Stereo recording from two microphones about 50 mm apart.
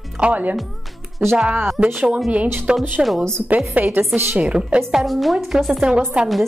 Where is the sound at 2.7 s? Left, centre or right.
Centre.